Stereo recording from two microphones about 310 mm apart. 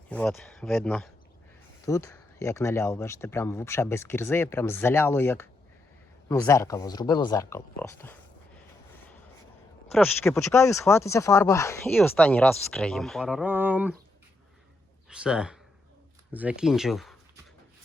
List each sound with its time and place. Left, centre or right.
0.1 s speech: centre
9.9 s speech: centre
15.1 s speech: centre